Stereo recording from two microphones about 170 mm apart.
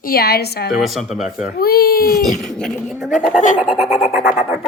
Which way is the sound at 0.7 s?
Centre (ahead or behind).